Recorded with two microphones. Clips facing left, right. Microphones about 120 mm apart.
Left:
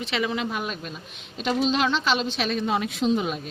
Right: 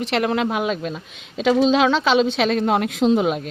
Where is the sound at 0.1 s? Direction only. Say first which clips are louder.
Right 6 dB; 70° right (ahead or behind).